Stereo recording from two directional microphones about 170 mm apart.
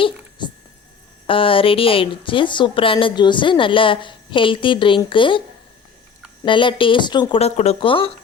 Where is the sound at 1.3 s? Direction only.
30° left (ahead or behind).